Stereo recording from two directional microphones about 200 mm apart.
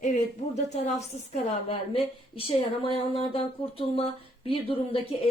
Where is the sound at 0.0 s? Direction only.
35° left (ahead or behind).